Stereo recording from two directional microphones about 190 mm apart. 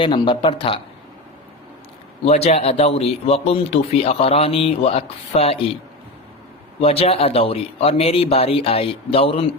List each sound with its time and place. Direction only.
0.0 s speech: 25° left (ahead or behind)
2.2 s a man's voice: 35° left (ahead or behind)
6.8 s a man's voice: 30° left (ahead or behind)